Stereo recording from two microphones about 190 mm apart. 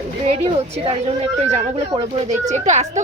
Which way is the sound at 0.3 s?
30° right (ahead or behind).